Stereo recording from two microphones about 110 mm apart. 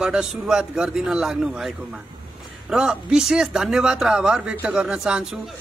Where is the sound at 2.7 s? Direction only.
5° right (ahead or behind).